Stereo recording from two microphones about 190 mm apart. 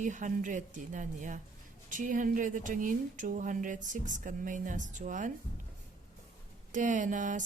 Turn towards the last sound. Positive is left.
turn(degrees=-40)  # may be behind; listen again after turning